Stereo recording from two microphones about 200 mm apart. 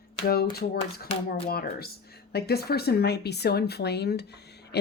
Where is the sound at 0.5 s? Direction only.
50° left (ahead or behind).